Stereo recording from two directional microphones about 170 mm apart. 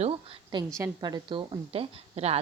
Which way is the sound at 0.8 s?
20° right (ahead or behind).